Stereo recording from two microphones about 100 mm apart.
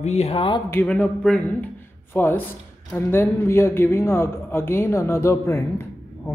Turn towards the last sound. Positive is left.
turn(degrees=25)  # may be behind; listen again after turning